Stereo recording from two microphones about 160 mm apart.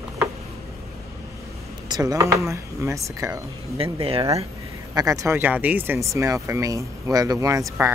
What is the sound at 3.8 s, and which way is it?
Speech, 35° right (ahead or behind).